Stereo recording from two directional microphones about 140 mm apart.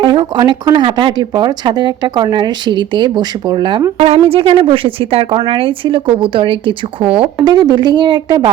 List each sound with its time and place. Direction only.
0.0 s speech: 35° right (ahead or behind)
3.9 s speech: 45° right (ahead or behind)
7.5 s speech: 30° right (ahead or behind)